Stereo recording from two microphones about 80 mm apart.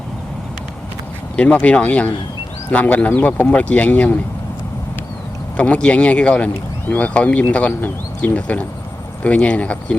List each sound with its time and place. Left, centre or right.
1.4 s speech: centre
5.5 s speech: centre